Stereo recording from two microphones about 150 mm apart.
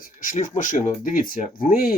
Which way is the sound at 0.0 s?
60° left (ahead or behind).